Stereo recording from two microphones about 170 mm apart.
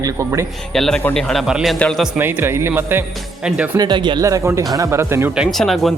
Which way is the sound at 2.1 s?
10° right (ahead or behind).